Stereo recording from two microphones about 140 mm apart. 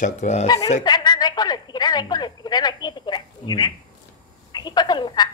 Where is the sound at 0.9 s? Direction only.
30° left (ahead or behind).